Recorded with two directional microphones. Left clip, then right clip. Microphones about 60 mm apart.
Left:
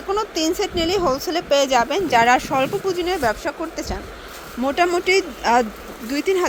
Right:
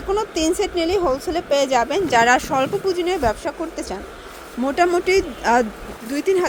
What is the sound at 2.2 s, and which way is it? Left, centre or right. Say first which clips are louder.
Speech: even; right.